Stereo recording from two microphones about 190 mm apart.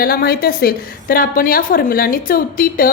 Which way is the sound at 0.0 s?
50° left (ahead or behind).